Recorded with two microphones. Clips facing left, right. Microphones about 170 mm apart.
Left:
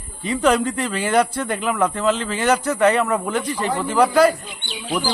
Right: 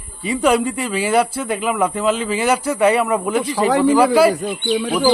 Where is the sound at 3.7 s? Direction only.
90° right.